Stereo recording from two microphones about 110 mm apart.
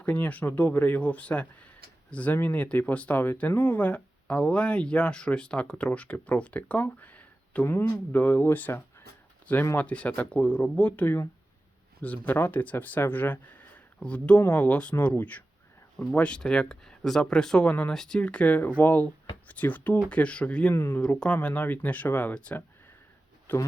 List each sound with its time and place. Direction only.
0.0 s speech: 15° left (ahead or behind)